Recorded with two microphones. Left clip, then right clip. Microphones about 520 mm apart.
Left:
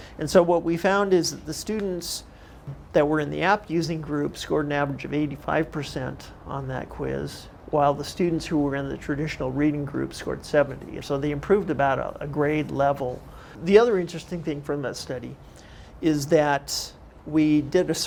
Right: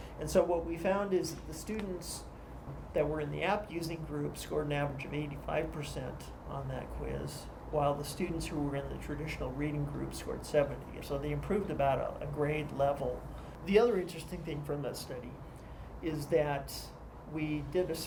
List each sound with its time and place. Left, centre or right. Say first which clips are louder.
0.2 s speech: left 11 dB; left
2.9 s speech: left 12 dB; left
13.7 s speech: left 10 dB; left